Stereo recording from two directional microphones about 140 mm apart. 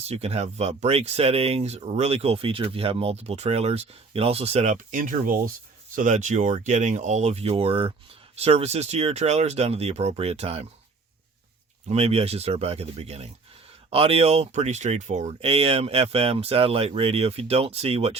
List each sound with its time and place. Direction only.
0.0 s speech: 50° right (ahead or behind); by 5.4 s 85° right
6.0 s speech: 60° right (ahead or behind)
11.9 s speech: 50° right (ahead or behind)